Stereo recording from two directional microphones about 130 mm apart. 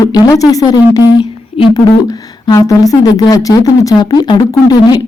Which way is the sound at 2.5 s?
25° left (ahead or behind).